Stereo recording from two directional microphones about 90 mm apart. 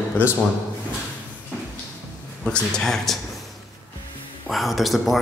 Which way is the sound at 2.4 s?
10° left (ahead or behind).